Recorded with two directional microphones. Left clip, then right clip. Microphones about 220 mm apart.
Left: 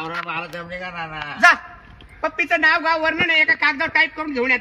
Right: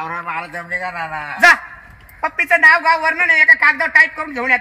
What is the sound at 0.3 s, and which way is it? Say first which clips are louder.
A woman's voice: right 5 dB; 15° left (ahead or behind).